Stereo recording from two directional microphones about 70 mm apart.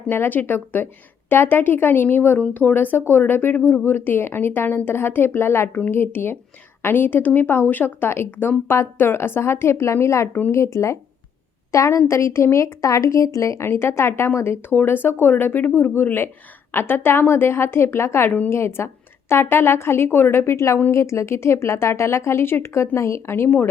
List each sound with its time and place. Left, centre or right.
0.1 s speech: left
18.3 s speech: left
18.5 s speech: left